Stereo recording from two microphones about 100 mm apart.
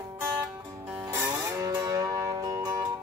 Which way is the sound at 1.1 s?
30° right (ahead or behind).